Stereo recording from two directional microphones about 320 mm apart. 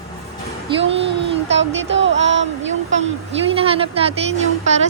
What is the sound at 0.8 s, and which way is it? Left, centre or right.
Speech, centre.